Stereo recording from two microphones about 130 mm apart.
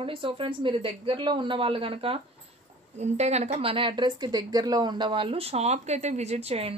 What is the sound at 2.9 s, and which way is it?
A woman's voice, 60° right (ahead or behind).